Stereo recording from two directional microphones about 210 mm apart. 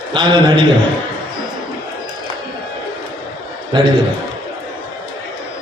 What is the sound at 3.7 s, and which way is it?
Speech, 20° right (ahead or behind).